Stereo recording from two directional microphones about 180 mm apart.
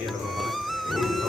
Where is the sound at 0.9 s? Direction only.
Centre (ahead or behind).